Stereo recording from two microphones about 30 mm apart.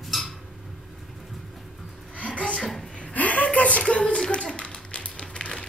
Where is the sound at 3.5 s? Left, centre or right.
Left.